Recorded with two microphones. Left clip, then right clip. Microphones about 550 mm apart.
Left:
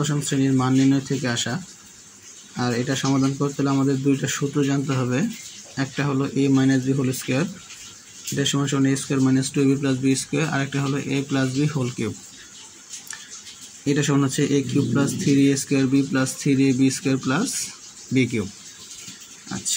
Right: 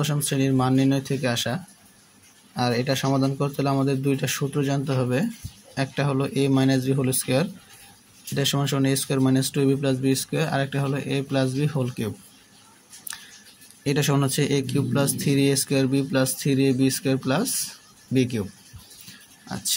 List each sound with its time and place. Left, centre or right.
0.0 s speech: right
2.6 s speech: right
13.8 s speech: right